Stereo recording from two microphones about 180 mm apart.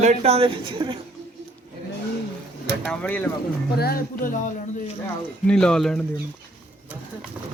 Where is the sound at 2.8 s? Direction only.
10° left (ahead or behind).